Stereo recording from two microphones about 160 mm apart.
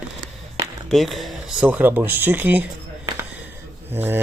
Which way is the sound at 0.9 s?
Centre (ahead or behind).